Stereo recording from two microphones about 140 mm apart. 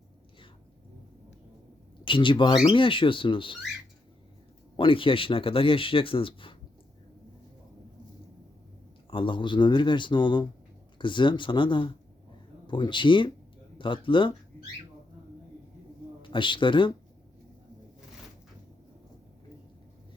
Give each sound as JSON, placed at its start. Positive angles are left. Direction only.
{"t": 2.0, "sound": "speech", "side_deg": 35}
{"t": 4.8, "sound": "speech", "side_deg": 40}
{"t": 9.0, "sound": "speech", "side_deg": 35}
{"t": 16.2, "sound": "speech", "side_deg": 35}